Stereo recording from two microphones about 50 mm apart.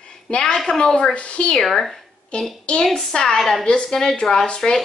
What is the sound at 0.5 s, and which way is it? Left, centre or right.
A woman's voice, centre.